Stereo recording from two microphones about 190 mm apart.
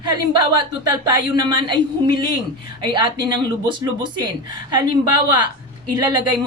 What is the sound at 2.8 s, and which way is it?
Speech, 25° right (ahead or behind).